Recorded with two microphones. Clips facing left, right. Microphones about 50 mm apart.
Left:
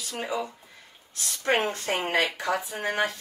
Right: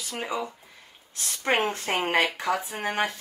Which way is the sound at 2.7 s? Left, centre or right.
Right.